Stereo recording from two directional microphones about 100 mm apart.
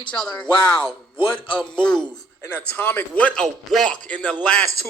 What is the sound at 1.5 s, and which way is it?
A man's voice, 10° left (ahead or behind).